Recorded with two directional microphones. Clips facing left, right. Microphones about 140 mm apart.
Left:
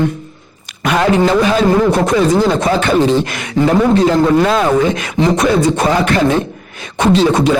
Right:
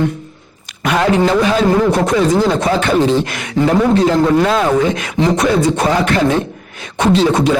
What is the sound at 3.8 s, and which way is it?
Speech, 25° left (ahead or behind).